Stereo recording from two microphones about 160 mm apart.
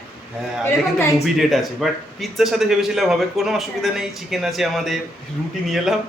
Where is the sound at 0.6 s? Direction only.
15° left (ahead or behind).